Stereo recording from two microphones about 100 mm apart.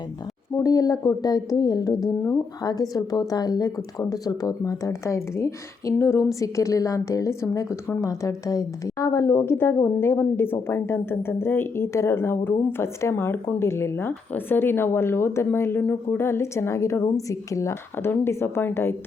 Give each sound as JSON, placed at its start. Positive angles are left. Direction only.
{"t": 0.5, "sound": "speech", "side_deg": 35}